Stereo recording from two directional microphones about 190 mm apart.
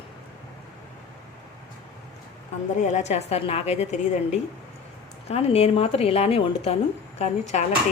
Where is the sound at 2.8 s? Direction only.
40° left (ahead or behind).